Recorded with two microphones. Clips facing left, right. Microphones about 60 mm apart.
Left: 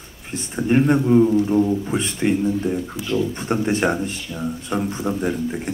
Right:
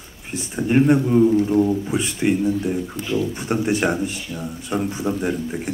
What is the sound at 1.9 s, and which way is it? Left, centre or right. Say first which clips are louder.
Speech: even; centre.